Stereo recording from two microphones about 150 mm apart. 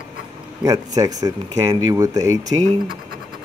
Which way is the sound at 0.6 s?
25° right (ahead or behind).